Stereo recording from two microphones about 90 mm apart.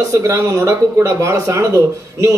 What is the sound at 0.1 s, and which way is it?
Speech, 35° right (ahead or behind).